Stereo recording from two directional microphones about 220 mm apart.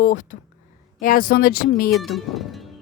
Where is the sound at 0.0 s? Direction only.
40° left (ahead or behind).